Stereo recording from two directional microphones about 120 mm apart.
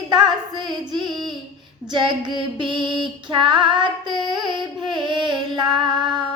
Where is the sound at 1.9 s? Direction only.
40° right (ahead or behind).